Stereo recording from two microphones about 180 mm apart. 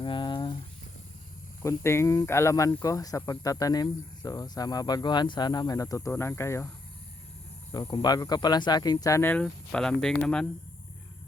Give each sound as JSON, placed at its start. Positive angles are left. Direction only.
{"t": 0.0, "sound": "a sound", "side_deg": 25}
{"t": 1.6, "sound": "speech", "side_deg": 15}
{"t": 7.7, "sound": "speech", "side_deg": 25}